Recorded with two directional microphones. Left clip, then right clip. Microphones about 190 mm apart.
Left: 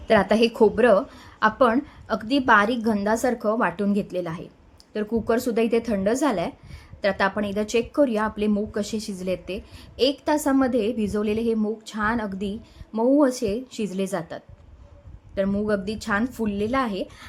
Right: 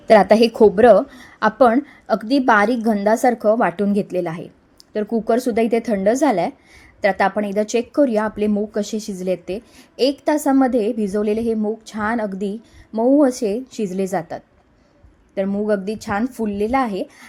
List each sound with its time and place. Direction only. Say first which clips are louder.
0.1 s speech: right 7 dB; 25° right (ahead or behind)